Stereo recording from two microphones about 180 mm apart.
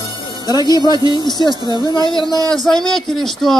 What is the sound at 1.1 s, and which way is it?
Speech, 25° left (ahead or behind).